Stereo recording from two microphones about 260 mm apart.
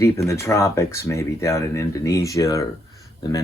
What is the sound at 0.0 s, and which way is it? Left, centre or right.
Speech, centre.